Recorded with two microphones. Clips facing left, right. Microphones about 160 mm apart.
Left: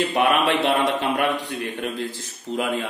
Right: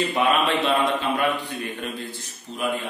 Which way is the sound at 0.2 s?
75° left (ahead or behind).